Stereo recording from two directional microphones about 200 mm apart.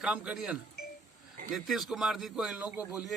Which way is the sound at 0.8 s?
50° left (ahead or behind).